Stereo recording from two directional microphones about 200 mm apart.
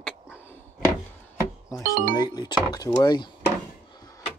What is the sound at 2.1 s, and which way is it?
Speech, 20° left (ahead or behind).